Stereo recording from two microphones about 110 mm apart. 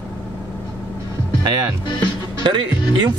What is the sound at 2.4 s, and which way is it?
Speech, 45° right (ahead or behind).